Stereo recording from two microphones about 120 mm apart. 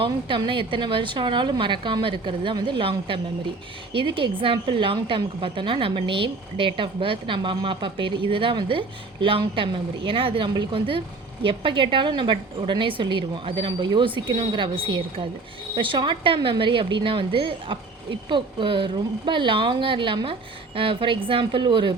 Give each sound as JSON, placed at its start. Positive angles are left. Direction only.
{"t": 0.0, "sound": "a woman's voice", "side_deg": -45}